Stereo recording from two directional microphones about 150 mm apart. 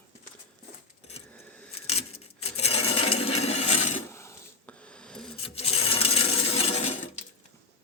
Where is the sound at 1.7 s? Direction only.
40° left (ahead or behind).